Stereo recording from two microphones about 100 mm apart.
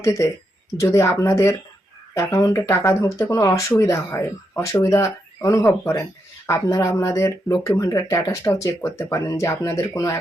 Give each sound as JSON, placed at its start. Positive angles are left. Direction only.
{"t": 0.0, "sound": "speech", "side_deg": 30}